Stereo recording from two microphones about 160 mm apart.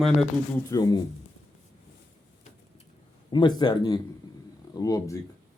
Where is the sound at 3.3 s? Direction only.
25° left (ahead or behind).